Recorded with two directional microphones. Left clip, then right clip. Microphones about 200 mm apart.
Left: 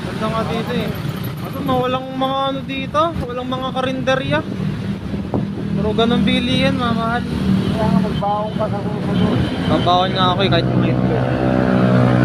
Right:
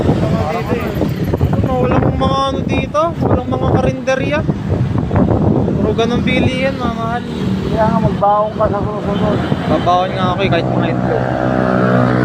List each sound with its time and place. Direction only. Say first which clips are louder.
9.8 s speech: even; 20° left (ahead or behind)